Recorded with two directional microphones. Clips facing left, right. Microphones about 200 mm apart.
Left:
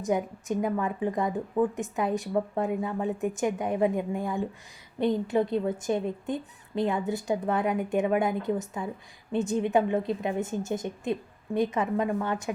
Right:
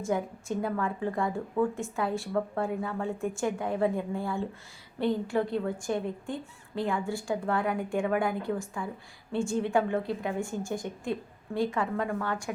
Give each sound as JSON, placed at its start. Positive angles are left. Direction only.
{"t": 0.0, "sound": "a woman's voice", "side_deg": 20}